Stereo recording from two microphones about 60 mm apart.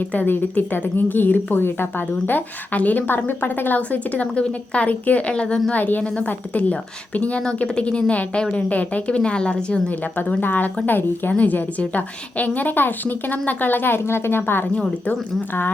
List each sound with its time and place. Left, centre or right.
0.1 s a woman's voice: left
5.7 s a woman's voice: left
10.2 s a woman's voice: left